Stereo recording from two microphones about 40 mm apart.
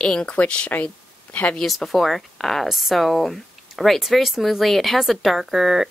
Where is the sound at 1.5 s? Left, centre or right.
Centre.